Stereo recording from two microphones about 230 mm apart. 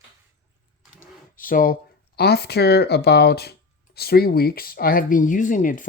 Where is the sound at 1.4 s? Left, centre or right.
Left.